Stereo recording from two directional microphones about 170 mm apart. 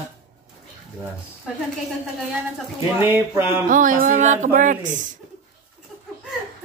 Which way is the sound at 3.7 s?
50° right (ahead or behind).